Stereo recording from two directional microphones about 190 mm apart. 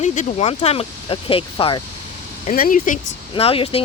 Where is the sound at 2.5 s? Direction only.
45° left (ahead or behind).